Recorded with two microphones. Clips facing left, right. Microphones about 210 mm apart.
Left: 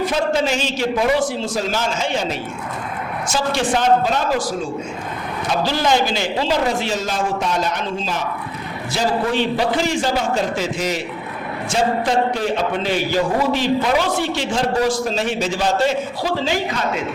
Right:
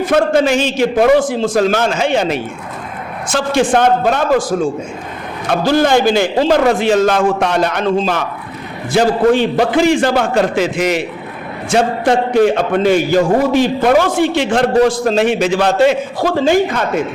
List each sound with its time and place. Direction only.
0.0 s a man's voice: 55° right (ahead or behind)
3.2 s a man's voice: 55° right (ahead or behind)